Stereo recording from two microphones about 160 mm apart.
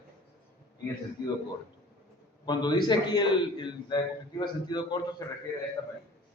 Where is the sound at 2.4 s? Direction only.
25° left (ahead or behind).